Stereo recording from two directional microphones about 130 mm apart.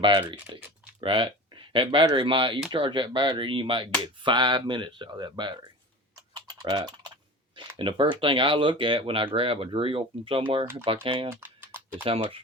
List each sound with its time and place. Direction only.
0.0 s speech: 40° right (ahead or behind)
6.3 s typing: 30° right (ahead or behind)
7.8 s speech: 40° right (ahead or behind)
11.3 s typing: 15° right (ahead or behind)
12.0 s speech: 45° right (ahead or behind)